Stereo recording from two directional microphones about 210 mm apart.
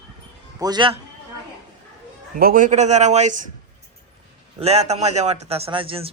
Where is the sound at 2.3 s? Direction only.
40° right (ahead or behind).